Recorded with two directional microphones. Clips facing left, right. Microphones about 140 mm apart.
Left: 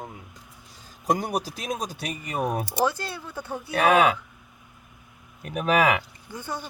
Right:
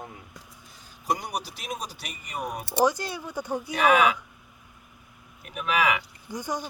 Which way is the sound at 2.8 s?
15° right (ahead or behind).